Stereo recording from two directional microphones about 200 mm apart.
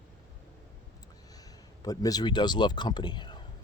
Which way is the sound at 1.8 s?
20° left (ahead or behind).